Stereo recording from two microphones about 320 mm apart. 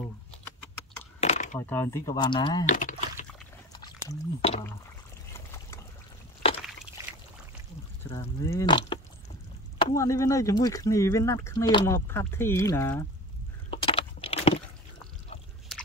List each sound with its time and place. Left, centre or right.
1.2 s coin: left
1.6 s speech: centre; by 3.3 s left
3.7 s a sound: centre
5.3 s boat: centre
8.0 s speech: centre
13.7 s a sound: centre
15.7 s biting: centre